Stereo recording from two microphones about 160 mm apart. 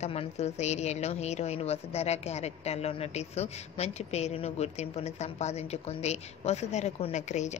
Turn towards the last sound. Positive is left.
turn(degrees=45)  # may be behind; listen again after turning